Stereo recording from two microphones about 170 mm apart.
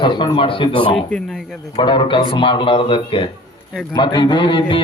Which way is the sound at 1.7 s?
30° left (ahead or behind).